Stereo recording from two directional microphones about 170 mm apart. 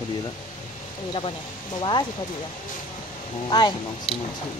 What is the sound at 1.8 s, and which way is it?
Speech, 25° left (ahead or behind).